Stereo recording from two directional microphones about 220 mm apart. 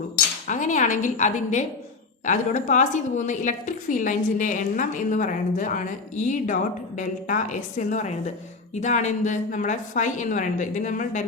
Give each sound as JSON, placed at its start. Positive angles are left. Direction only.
{"t": 0.4, "sound": "a woman's voice", "side_deg": 35}